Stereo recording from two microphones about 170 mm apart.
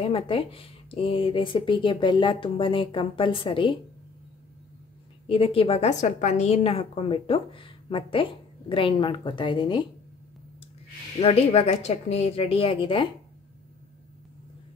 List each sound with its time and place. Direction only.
0.0 s a woman's voice: 30° left (ahead or behind)
5.2 s a woman's voice: 35° left (ahead or behind)
11.1 s a woman's voice: 35° left (ahead or behind)